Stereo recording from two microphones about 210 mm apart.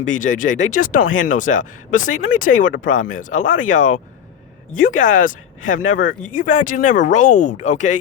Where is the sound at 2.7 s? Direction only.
65° left (ahead or behind).